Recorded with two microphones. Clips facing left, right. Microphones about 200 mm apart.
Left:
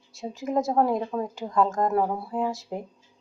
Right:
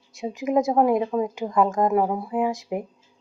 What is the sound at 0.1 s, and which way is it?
Speech, 15° right (ahead or behind).